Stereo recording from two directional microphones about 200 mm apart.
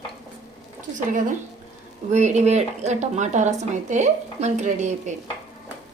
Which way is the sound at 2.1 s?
35° right (ahead or behind).